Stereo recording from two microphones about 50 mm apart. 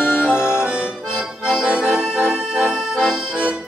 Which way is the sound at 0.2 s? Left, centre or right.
Centre.